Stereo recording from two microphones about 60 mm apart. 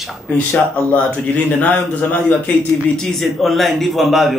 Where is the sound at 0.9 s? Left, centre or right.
Left.